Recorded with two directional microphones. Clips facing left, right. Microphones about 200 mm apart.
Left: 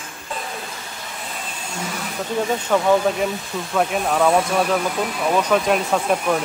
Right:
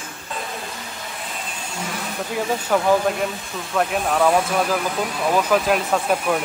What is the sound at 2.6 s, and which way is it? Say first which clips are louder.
Speech: left 1 dB; 5° right (ahead or behind).